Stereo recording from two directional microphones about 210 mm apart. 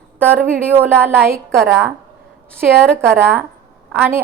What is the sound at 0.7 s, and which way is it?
Speech, 10° right (ahead or behind).